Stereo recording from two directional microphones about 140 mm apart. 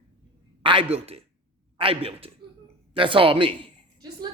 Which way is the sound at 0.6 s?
40° right (ahead or behind).